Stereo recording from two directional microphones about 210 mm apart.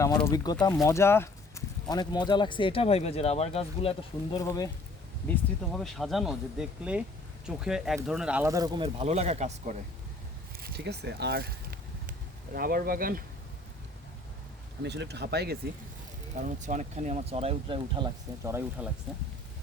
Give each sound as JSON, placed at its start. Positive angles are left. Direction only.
{"t": 0.2, "sound": "speech", "side_deg": 15}
{"t": 5.3, "sound": "speech", "side_deg": 0}
{"t": 10.6, "sound": "speech", "side_deg": -50}
{"t": 14.8, "sound": "speech", "side_deg": -55}
{"t": 16.3, "sound": "speech", "side_deg": -35}